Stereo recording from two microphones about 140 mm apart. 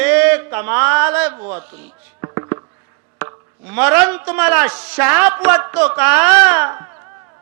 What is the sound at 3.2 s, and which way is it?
Speech, 15° right (ahead or behind).